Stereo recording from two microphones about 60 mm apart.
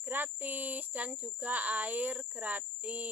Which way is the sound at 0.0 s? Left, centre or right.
Right.